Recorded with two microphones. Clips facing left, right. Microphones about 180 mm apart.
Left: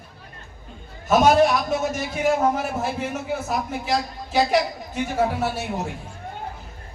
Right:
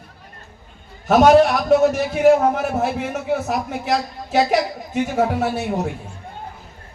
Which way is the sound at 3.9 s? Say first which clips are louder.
Right 5 dB; 65° right (ahead or behind).